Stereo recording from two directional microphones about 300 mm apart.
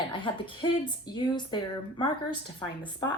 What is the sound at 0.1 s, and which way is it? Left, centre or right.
Speech, centre.